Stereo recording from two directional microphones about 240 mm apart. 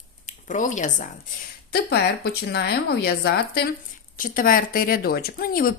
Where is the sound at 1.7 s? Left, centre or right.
Left.